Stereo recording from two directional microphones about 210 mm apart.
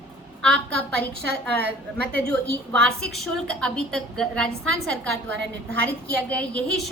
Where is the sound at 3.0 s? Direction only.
5° left (ahead or behind).